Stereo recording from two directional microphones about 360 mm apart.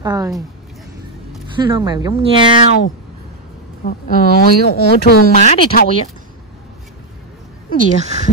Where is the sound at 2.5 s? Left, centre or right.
Left.